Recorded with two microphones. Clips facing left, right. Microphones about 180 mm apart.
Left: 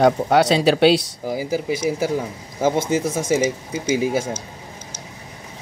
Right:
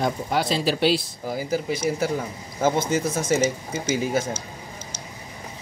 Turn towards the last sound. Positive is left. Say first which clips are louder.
# left 3 dB
turn(degrees=10)  # may be behind; listen again after turning